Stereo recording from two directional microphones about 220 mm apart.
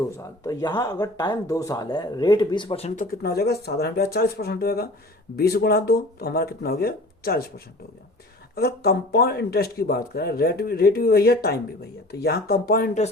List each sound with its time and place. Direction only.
0.2 s a man's voice: 15° left (ahead or behind); by 7.5 s 45° left (ahead or behind)
8.5 s a man's voice: 45° left (ahead or behind)